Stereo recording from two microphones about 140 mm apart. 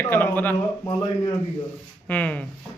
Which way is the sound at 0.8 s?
25° left (ahead or behind).